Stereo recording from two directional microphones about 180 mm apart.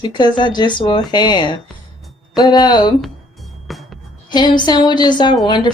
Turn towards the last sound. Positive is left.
turn(degrees=25)  # may be behind; listen again after turning